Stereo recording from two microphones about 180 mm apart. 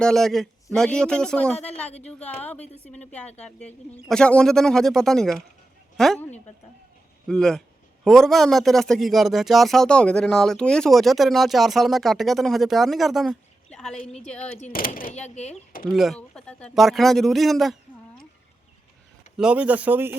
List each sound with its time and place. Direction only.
0.0 s a man's voice: 5° left (ahead or behind)
14.6 s speech: 50° left (ahead or behind)
15.9 s a man's voice: centre (ahead or behind)
19.4 s speech: 5° right (ahead or behind)